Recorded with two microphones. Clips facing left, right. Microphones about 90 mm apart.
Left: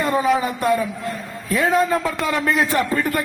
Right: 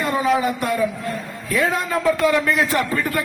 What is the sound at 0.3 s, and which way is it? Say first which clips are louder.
A man's voice: left 1 dB; 30° left (ahead or behind).